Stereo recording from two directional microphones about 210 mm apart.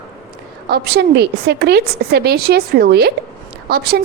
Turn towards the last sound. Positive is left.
turn(degrees=-50)  # may be behind; listen again after turning